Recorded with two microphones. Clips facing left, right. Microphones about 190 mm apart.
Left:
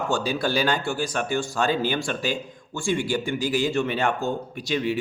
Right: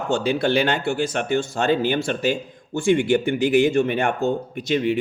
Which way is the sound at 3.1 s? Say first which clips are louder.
Right 7 dB; 60° right (ahead or behind).